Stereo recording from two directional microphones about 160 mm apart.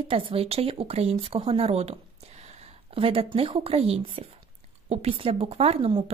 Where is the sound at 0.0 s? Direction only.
35° right (ahead or behind).